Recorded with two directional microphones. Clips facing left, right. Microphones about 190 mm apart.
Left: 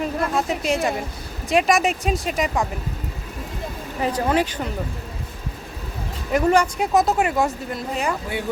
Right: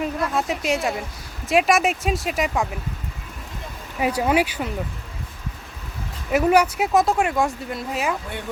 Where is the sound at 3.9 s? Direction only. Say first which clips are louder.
Right 1 dB; 10° right (ahead or behind).